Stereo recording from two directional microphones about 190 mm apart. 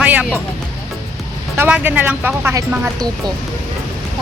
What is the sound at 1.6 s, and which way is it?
Speech, 10° right (ahead or behind).